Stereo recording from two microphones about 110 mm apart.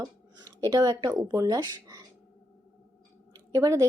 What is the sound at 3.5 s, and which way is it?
Speech, 30° right (ahead or behind).